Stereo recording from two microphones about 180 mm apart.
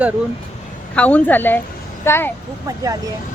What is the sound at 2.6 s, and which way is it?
Speech, 20° right (ahead or behind).